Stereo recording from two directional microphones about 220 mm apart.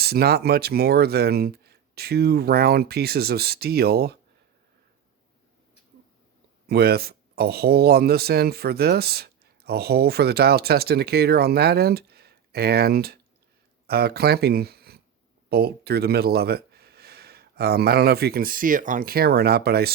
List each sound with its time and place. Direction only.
0.0 s speech: 45° right (ahead or behind)
6.7 s speech: 45° right (ahead or behind)